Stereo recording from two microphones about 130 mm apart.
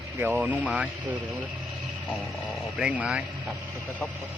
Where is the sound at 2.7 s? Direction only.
10° right (ahead or behind).